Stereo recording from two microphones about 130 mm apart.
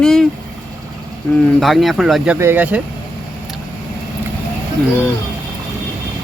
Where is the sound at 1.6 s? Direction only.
Centre (ahead or behind).